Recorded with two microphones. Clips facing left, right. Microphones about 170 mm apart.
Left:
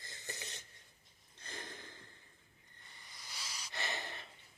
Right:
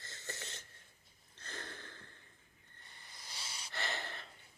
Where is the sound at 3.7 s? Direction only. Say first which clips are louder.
Right 1 dB; 20° left (ahead or behind).